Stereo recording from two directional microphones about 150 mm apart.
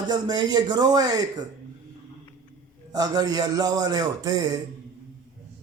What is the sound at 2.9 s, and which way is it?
Speech, 25° right (ahead or behind).